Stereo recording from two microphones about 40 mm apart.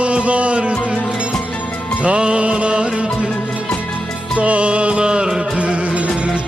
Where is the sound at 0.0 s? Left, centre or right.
Right.